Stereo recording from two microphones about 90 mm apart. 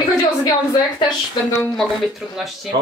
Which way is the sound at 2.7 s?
55° right (ahead or behind).